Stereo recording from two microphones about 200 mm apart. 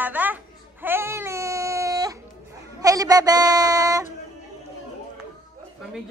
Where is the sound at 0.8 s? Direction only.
10° right (ahead or behind).